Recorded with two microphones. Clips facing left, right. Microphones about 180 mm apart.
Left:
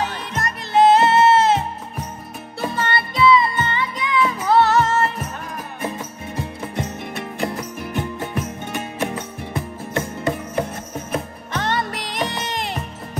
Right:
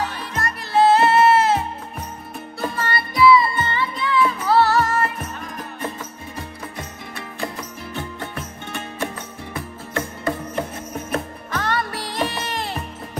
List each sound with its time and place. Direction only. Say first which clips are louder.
0.0 s music: left 1 dB; 20° left (ahead or behind)
2.7 s music: left 5 dB; 25° left (ahead or behind)
6.3 s music: left 8 dB; 25° left (ahead or behind)
11.5 s music: left 1 dB; 20° left (ahead or behind)